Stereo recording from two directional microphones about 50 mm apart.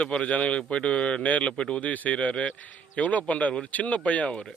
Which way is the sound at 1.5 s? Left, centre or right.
Centre.